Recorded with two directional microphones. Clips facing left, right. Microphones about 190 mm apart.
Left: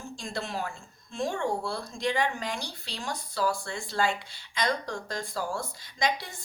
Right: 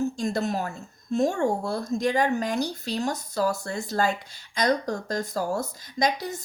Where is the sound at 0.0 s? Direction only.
45° right (ahead or behind).